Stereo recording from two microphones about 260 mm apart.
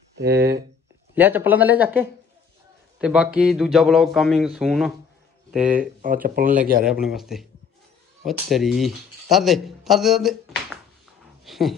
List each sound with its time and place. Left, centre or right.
0.2 s speech: right
1.1 s speech: centre
5.8 s speech: right
6.8 s speech: centre
11.4 s dog: centre